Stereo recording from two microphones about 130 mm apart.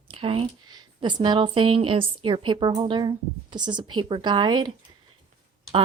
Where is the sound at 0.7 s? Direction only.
35° right (ahead or behind).